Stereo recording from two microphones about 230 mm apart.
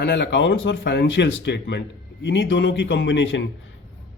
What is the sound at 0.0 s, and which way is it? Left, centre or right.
A man's voice, left.